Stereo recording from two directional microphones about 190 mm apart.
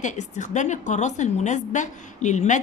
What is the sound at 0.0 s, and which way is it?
A woman's voice, 40° left (ahead or behind).